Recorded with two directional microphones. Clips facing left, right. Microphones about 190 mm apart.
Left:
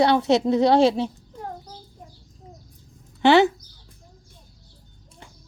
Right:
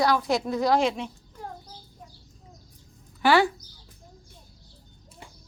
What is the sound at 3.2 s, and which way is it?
Speech, 25° left (ahead or behind).